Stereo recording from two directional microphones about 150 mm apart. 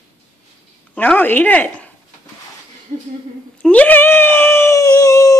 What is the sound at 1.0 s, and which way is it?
Speech, 10° left (ahead or behind).